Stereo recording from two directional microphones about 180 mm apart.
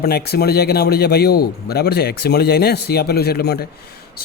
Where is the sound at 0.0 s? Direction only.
60° left (ahead or behind).